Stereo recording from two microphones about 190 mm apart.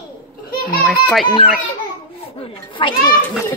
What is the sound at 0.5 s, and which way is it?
Children playing, 50° left (ahead or behind).